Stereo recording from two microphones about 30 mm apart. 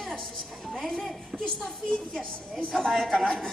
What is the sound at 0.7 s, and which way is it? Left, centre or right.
Speech, centre.